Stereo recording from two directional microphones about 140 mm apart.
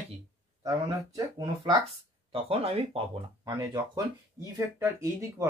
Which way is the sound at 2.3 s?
45° right (ahead or behind).